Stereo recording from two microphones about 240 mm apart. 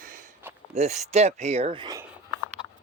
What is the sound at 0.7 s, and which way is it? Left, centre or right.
Speech, right.